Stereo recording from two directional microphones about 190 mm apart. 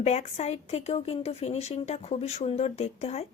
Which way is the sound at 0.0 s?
35° left (ahead or behind).